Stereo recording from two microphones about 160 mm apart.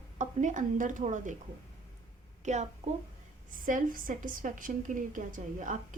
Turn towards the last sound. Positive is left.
turn(degrees=-55)  # may be behind; listen again after turning